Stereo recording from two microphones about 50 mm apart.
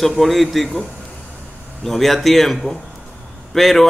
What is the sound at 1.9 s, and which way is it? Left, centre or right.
Speech, centre.